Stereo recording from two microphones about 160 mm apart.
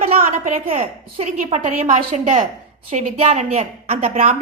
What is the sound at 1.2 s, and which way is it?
A woman's voice, 45° right (ahead or behind).